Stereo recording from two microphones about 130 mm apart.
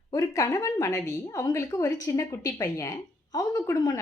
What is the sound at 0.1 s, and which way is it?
Speech, 25° left (ahead or behind).